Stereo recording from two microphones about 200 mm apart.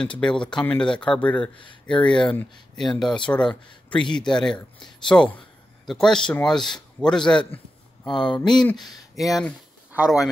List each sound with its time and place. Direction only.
0.2 s a man's voice: 5° left (ahead or behind)
8.1 s speech: 20° left (ahead or behind)
9.9 s speech: 5° right (ahead or behind)